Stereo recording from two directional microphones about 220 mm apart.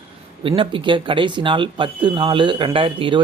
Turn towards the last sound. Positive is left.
turn(degrees=-25)  # may be behind; listen again after turning